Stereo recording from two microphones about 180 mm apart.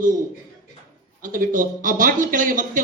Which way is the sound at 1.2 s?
50° right (ahead or behind).